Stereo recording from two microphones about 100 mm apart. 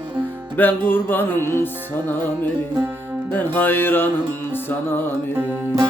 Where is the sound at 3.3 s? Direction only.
20° left (ahead or behind).